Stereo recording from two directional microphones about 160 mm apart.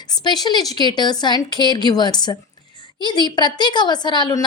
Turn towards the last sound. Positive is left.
turn(degrees=25)  # may be behind; listen again after turning